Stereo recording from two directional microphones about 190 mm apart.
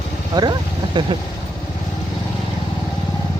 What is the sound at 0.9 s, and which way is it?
Speech, 25° right (ahead or behind).